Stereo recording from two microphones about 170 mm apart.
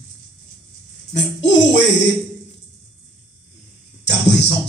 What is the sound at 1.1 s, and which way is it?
Speech, 90° left.